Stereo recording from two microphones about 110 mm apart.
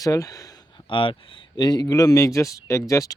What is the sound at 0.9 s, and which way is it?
Speech, 50° left (ahead or behind).